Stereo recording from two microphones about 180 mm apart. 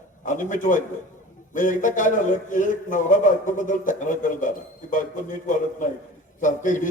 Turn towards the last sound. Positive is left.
turn(degrees=45)  # may be behind; listen again after turning